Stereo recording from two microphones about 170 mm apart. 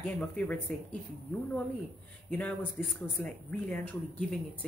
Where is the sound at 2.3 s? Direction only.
10° left (ahead or behind).